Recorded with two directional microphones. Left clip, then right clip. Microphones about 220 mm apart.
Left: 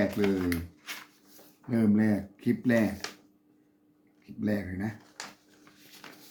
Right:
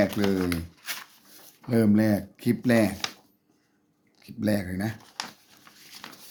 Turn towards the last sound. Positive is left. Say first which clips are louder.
# right 5 dB
turn(degrees=-55)  # may be behind; listen again after turning